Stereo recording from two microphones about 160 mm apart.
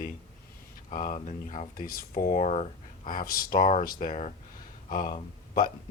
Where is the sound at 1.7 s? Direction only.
65° left (ahead or behind); by 3.1 s 45° left (ahead or behind).